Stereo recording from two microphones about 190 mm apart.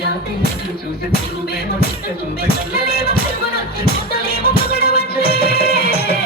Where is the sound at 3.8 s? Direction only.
55° left (ahead or behind).